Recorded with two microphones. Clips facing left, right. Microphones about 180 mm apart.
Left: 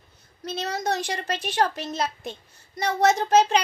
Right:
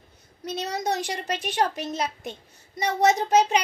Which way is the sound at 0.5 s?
15° right (ahead or behind).